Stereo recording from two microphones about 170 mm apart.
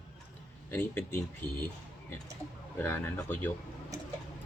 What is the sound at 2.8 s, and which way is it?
Speech, 15° left (ahead or behind).